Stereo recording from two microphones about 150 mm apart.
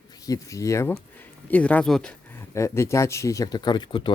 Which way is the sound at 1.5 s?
10° left (ahead or behind).